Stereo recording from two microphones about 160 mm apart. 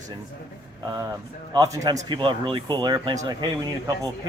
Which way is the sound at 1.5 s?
20° right (ahead or behind).